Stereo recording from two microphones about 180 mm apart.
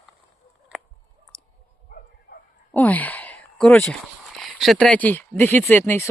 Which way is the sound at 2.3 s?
45° left (ahead or behind).